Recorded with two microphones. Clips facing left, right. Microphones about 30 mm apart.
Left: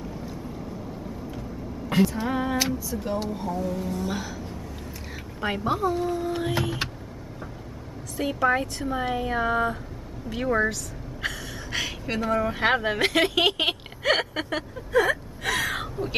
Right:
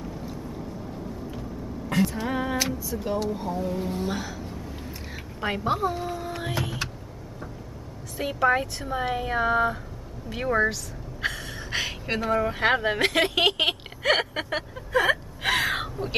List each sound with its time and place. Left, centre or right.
1.9 s vehicle: centre
2.2 s a sound: centre
3.4 s speech: centre
4.1 s speech: centre
5.4 s a sound: centre
5.7 s speech: centre
6.1 s a sound: centre
8.2 s speech: centre
10.3 s a sound: centre
11.2 s speech: centre
15.0 s gasp: right
15.8 s crow: centre